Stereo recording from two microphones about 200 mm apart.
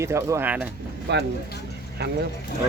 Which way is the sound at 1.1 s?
60° right (ahead or behind).